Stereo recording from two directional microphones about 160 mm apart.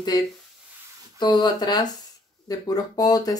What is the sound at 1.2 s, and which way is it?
Speech, 25° left (ahead or behind).